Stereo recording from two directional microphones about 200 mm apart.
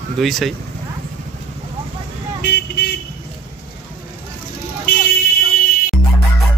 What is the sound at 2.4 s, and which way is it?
Vehicle, 55° left (ahead or behind).